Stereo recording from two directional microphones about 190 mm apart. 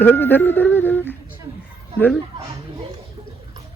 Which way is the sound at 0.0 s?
10° left (ahead or behind).